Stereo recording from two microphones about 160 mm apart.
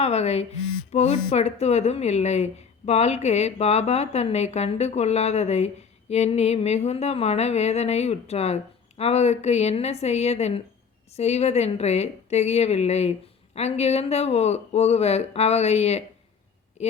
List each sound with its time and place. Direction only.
0.0 s speech: 40° left (ahead or behind)